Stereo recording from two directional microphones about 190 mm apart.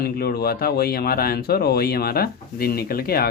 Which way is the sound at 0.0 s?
55° left (ahead or behind).